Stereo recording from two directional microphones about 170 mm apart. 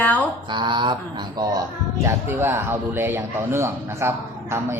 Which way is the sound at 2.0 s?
15° right (ahead or behind).